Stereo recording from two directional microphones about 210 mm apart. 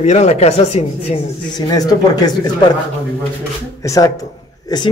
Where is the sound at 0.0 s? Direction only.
35° left (ahead or behind).